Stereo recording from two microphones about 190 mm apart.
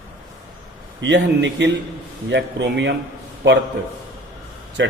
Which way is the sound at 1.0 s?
70° right (ahead or behind).